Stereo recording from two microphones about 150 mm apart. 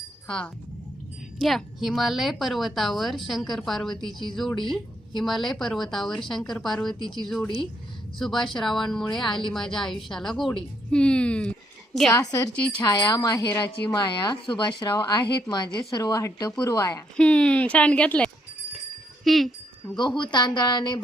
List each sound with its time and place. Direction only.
0.3 s a woman's voice: 5° left (ahead or behind)
12.1 s a woman's voice: 20° left (ahead or behind)
17.2 s speech: 5° left (ahead or behind)
20.0 s a woman's voice: 30° left (ahead or behind)